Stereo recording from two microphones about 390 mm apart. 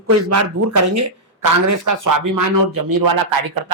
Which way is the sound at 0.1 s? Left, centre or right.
Right.